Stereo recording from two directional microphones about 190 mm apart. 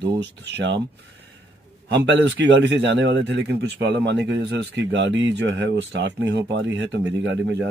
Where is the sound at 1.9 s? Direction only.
70° right (ahead or behind).